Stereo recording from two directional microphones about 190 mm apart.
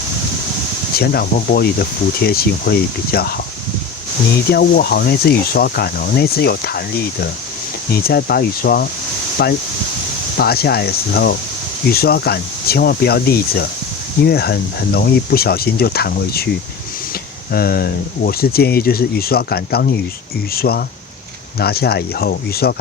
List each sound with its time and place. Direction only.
0.9 s speech: 55° left (ahead or behind)
4.5 s speech: 55° left (ahead or behind)
17.5 s speech: 50° left (ahead or behind)